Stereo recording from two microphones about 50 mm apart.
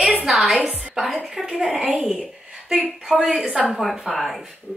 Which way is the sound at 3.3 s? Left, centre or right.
Centre.